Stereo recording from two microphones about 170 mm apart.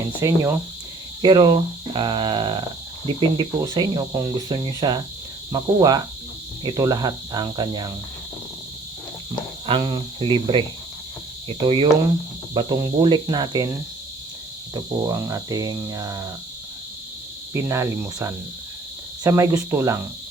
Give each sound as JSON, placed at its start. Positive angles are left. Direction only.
{"t": 0.2, "sound": "cricket", "side_deg": -15}
{"t": 1.2, "sound": "speech", "side_deg": -25}
{"t": 9.6, "sound": "speech", "side_deg": -30}
{"t": 17.5, "sound": "cricket", "side_deg": -15}